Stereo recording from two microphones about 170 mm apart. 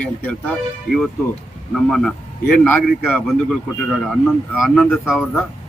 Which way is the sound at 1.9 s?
5° left (ahead or behind).